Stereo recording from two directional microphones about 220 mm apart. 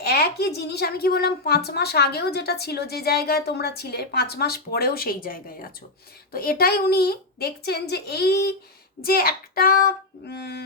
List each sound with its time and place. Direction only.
0.0 s a woman's voice: 45° left (ahead or behind)